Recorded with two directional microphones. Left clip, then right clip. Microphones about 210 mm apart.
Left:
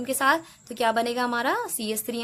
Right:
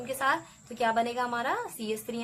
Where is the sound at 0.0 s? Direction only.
55° left (ahead or behind).